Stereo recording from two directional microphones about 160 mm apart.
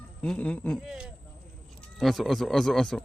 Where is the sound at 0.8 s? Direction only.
5° right (ahead or behind).